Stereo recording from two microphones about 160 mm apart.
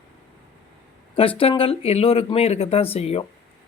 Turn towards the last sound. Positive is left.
turn(degrees=40)  # may be behind; listen again after turning